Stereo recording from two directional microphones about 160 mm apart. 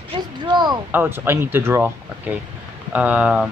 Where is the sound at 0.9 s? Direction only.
15° right (ahead or behind).